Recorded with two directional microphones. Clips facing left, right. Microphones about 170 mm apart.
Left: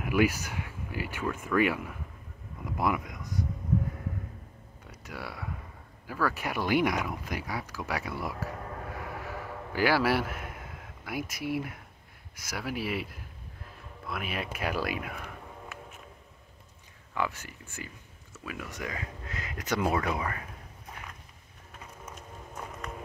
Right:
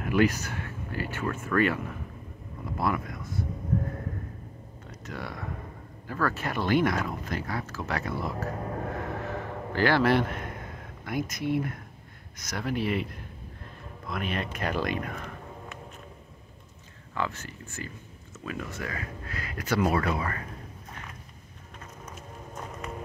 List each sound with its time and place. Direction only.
0.0 s speech: 10° left (ahead or behind)
5.0 s speech: 10° left (ahead or behind)
8.9 s a sound: 10° left (ahead or behind)
12.4 s speech: 5° left (ahead or behind)
17.1 s speech: 10° left (ahead or behind)